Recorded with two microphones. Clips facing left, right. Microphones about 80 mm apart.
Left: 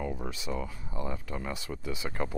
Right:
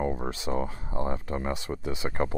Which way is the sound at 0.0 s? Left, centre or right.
Right.